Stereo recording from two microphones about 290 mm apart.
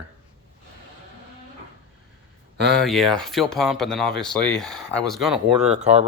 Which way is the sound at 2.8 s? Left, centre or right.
Centre.